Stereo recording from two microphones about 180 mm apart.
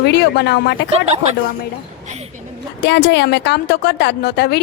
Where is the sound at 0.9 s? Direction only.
35° right (ahead or behind).